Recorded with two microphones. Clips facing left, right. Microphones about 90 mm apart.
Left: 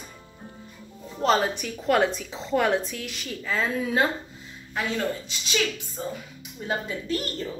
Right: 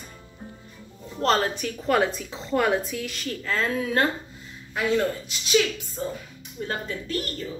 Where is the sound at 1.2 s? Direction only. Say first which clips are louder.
Even; 5° left (ahead or behind).